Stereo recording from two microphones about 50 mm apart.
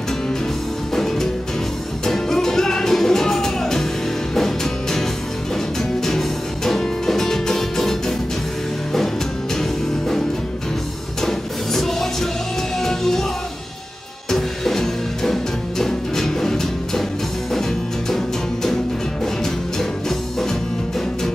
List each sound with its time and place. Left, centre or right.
0.9 s music: centre
5.8 s music: centre
9.6 s music: centre
11.2 s music: centre
14.3 s music: centre
18.1 s music: centre